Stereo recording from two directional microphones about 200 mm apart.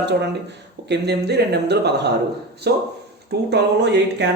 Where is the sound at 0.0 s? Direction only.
60° right (ahead or behind).